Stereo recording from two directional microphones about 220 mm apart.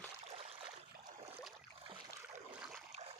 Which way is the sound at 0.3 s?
30° right (ahead or behind).